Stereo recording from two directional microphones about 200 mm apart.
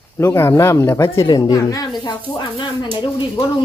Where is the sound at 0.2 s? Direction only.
10° left (ahead or behind).